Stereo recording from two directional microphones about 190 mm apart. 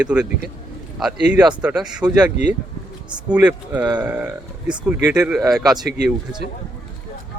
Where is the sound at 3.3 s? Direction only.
5° right (ahead or behind).